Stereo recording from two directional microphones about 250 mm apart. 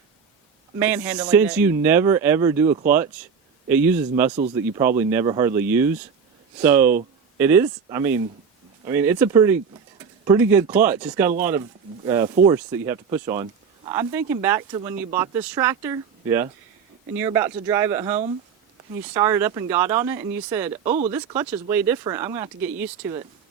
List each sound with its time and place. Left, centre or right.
0.8 s speech: centre
4.4 s speech: right
4.9 s speech: centre
20.8 s speech: right
21.1 s speech: centre